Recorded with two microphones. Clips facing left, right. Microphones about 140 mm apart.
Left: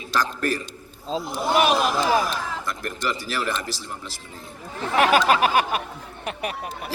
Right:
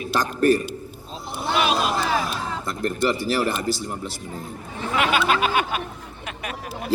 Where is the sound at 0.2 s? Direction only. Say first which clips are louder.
Right 5 dB; 30° right (ahead or behind).